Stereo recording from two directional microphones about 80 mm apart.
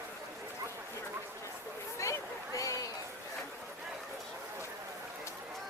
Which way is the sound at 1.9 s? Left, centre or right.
Left.